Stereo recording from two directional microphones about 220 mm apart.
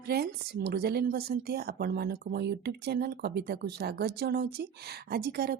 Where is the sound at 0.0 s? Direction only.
45° right (ahead or behind).